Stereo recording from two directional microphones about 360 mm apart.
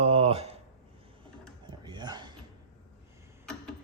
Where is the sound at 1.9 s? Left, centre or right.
Centre.